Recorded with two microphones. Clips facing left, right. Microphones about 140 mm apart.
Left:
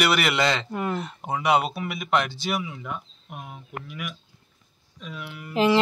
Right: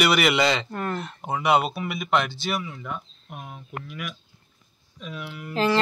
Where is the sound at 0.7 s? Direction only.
10° left (ahead or behind).